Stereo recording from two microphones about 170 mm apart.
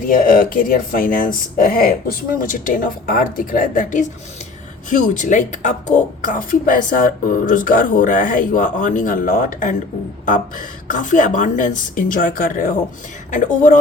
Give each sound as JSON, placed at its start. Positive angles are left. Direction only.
{"t": 0.1, "sound": "speech", "side_deg": 55}
{"t": 10.8, "sound": "speech", "side_deg": 50}